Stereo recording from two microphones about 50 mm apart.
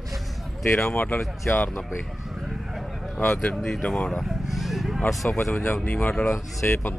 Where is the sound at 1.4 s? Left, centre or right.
Left.